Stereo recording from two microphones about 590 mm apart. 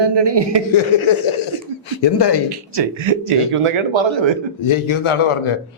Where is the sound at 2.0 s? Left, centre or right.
Left.